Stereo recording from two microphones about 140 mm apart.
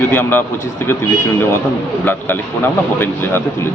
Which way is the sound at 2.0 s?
15° left (ahead or behind).